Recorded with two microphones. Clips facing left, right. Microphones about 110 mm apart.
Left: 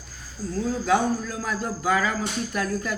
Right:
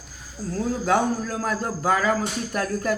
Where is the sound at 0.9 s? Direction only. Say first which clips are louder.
Right 1 dB; 50° right (ahead or behind).